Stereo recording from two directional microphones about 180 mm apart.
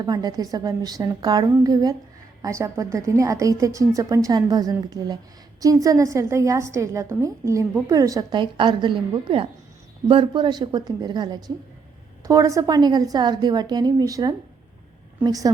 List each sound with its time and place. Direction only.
0.0 s a woman's voice: 20° right (ahead or behind)